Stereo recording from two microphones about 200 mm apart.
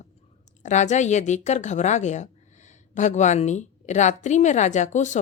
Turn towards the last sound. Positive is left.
turn(degrees=35)  # may be behind; listen again after turning